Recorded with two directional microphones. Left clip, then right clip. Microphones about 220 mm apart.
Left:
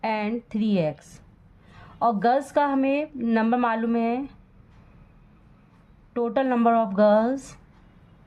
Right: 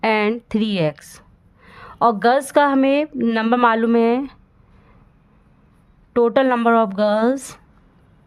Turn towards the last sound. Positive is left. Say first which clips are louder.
# right 2 dB
turn(degrees=-50)  # may be behind; listen again after turning